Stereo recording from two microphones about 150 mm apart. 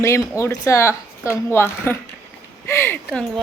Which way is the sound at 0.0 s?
20° left (ahead or behind).